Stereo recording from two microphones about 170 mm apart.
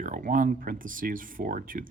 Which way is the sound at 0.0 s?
50° right (ahead or behind).